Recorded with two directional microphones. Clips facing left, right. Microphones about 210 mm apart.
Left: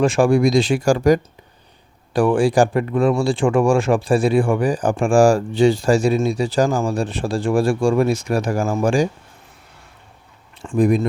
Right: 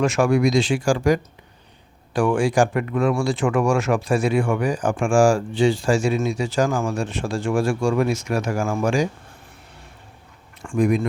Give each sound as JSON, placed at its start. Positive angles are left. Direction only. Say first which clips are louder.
{"t": 0.0, "sound": "speech", "louder": "left 3 dB", "side_deg": 30}
{"t": 10.8, "sound": "speech", "louder": "left 3 dB", "side_deg": 35}